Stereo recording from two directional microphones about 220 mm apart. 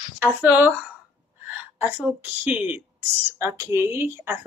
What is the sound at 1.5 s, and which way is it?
Speech, 5° right (ahead or behind).